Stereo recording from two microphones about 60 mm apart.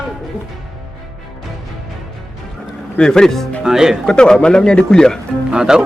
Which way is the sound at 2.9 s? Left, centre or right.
Centre.